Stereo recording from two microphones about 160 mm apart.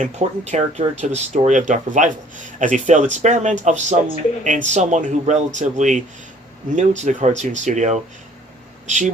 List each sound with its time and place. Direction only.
0.0 s speech: 45° right (ahead or behind)